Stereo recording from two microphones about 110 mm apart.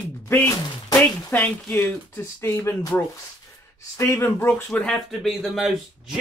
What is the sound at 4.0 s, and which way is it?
Speech, 25° left (ahead or behind).